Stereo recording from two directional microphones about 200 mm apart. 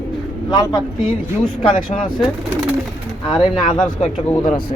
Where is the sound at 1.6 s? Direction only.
40° left (ahead or behind).